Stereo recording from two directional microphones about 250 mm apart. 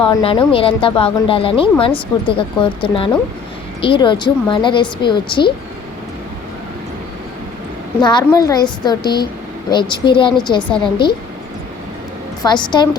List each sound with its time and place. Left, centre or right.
0.0 s speech: left
8.0 s a woman's voice: centre
12.4 s a woman's voice: centre